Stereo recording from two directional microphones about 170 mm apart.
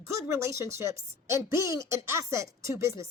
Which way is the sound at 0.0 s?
15° right (ahead or behind).